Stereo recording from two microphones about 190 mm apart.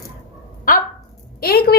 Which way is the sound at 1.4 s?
55° left (ahead or behind).